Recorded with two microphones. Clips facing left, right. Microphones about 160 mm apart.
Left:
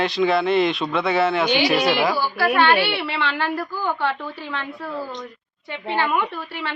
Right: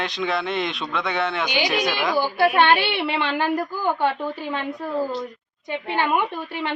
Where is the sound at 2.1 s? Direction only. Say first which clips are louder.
Right 2 dB; 20° right (ahead or behind).